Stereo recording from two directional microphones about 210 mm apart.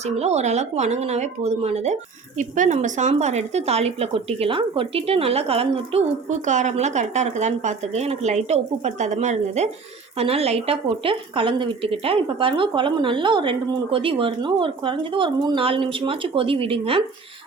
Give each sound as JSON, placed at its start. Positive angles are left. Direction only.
{"t": 0.0, "sound": "a woman's voice", "side_deg": -30}